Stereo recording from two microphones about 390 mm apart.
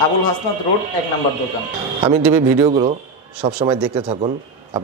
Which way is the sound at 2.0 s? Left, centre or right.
Centre.